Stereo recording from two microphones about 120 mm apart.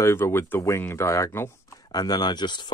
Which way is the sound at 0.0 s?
20° left (ahead or behind).